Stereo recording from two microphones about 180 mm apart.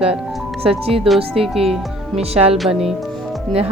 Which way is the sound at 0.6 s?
35° right (ahead or behind).